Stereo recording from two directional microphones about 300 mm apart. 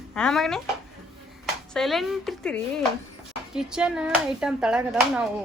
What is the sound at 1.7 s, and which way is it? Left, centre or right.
Speech, centre.